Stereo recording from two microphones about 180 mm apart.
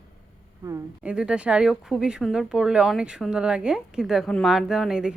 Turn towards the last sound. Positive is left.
turn(degrees=-5)  # may be behind; listen again after turning